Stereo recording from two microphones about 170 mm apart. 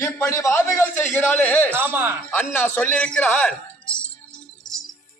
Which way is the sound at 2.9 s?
5° left (ahead or behind).